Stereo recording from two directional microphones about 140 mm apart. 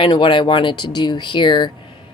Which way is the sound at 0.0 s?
35° left (ahead or behind).